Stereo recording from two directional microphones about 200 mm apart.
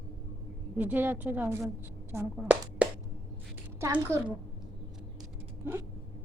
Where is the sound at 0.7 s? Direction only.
10° right (ahead or behind).